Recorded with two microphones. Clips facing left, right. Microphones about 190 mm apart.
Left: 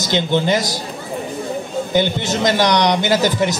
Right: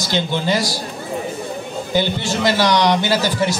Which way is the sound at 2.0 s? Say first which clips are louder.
Left 1 dB; 20° left (ahead or behind).